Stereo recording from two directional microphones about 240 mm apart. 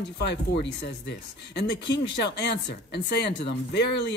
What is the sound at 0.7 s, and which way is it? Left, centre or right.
Speech, left.